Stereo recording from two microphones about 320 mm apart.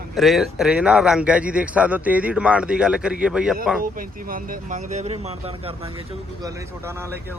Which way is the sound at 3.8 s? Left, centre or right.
Right.